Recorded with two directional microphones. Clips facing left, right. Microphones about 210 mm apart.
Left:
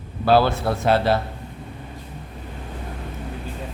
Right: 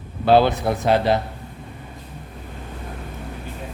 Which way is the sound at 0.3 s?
20° right (ahead or behind).